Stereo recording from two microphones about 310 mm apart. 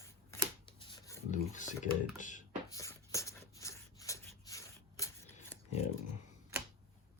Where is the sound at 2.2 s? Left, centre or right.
Left.